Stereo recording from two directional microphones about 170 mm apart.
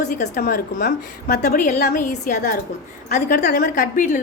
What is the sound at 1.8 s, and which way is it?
Speech, 65° left (ahead or behind).